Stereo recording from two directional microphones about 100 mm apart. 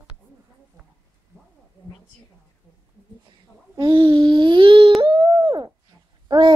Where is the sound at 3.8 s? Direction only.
55° right (ahead or behind).